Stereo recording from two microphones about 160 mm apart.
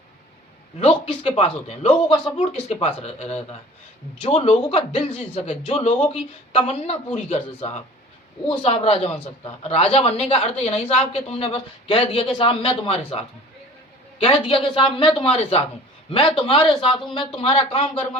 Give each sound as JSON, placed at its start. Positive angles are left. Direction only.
{"t": 0.8, "sound": "a woman's voice", "side_deg": 35}
{"t": 14.3, "sound": "a woman's voice", "side_deg": 35}